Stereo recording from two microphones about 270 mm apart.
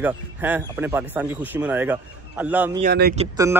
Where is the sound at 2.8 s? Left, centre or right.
Right.